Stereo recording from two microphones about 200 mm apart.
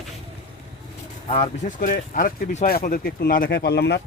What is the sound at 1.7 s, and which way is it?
Speech, 45° left (ahead or behind).